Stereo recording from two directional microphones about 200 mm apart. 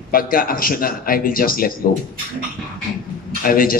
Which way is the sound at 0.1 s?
45° left (ahead or behind).